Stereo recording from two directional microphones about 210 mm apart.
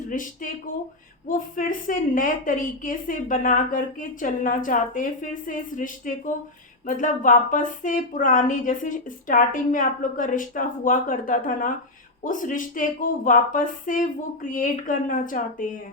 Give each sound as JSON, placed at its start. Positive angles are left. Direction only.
{"t": 0.1, "sound": "a woman's voice", "side_deg": 40}